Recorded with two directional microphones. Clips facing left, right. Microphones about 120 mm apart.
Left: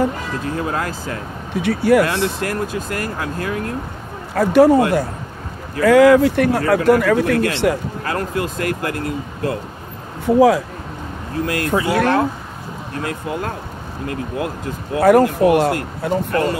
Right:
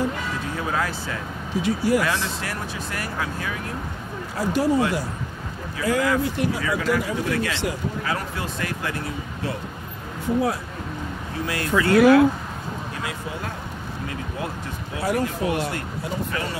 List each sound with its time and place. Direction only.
0.6 s speech: 50° left (ahead or behind)
5.8 s speech: 70° left (ahead or behind); by 9.6 s 50° left (ahead or behind)
10.2 s speech: 90° left
11.3 s speech: 50° left (ahead or behind)
11.9 s speech: 5° right (ahead or behind)
15.0 s speech: 60° left (ahead or behind)